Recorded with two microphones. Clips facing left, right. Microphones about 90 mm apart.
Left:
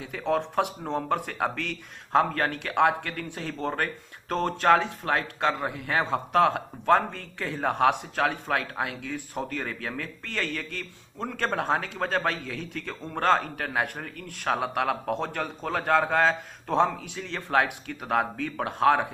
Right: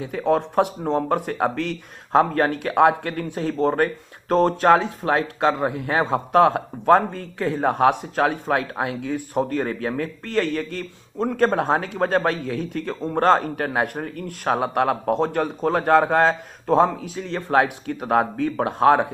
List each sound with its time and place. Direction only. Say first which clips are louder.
0.0 s a man's voice: right 6 dB; 15° right (ahead or behind)
9.3 s a man's voice: right 10 dB; 35° right (ahead or behind)
17.2 s a man's voice: right 5 dB; 20° right (ahead or behind)